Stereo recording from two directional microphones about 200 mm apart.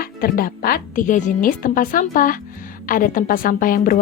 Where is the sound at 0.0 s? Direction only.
45° left (ahead or behind).